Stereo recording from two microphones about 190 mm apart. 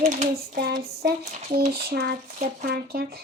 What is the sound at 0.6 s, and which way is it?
Hands, 55° right (ahead or behind).